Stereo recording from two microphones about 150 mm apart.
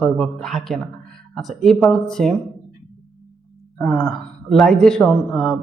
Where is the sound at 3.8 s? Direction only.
5° left (ahead or behind).